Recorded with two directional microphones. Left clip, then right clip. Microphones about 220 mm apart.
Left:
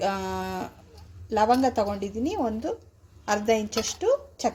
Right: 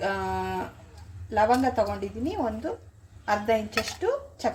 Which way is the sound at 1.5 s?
35° left (ahead or behind).